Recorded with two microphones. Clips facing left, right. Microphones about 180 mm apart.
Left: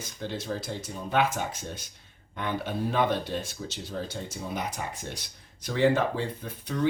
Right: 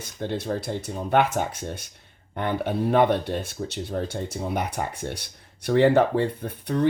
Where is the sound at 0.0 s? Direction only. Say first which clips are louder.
Right 6 dB; 60° right (ahead or behind).